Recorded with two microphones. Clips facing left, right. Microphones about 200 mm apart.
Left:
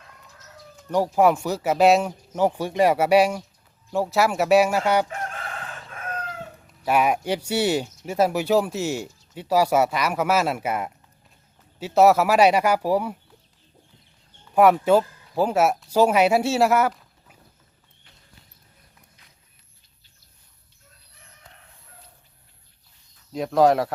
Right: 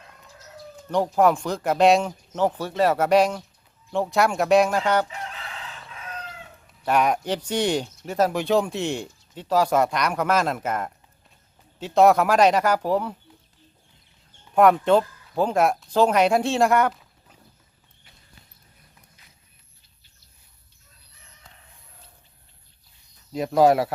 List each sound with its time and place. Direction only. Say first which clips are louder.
0.9 s speech: left 1 dB; 5° left (ahead or behind)
5.0 s chicken: left 4 dB; 50° left (ahead or behind)
6.8 s speech: left 1 dB; 10° left (ahead or behind)
14.5 s speech: even; 5° left (ahead or behind)
23.3 s speech: even; centre (ahead or behind)